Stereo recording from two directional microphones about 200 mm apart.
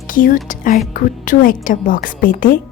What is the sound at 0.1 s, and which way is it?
A woman's voice, 45° left (ahead or behind).